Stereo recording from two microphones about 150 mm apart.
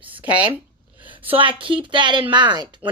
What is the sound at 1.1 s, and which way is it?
A woman's voice, 35° right (ahead or behind).